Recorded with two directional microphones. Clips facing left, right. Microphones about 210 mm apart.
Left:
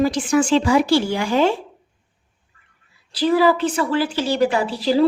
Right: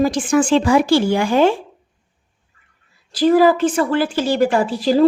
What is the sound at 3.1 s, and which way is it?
A woman's voice, 45° right (ahead or behind).